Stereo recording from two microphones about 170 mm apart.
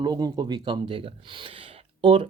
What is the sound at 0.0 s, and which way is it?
Speech, 25° right (ahead or behind).